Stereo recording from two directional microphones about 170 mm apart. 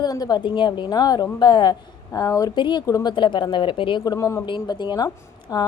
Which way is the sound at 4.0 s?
20° left (ahead or behind).